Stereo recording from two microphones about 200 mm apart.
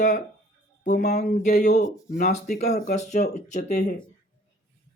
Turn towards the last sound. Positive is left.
turn(degrees=35)  # may be behind; listen again after turning